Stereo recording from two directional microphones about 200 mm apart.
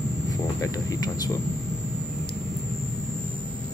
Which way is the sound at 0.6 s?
20° left (ahead or behind).